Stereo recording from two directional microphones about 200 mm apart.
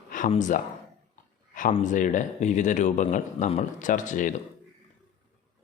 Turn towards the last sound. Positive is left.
turn(degrees=40)  # may be behind; listen again after turning